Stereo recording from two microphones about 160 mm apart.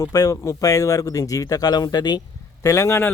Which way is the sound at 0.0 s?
20° left (ahead or behind).